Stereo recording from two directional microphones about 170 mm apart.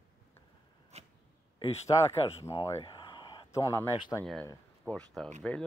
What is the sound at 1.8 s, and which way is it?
Speech, 40° left (ahead or behind).